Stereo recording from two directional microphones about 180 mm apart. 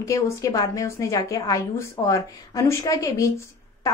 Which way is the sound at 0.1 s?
15° left (ahead or behind).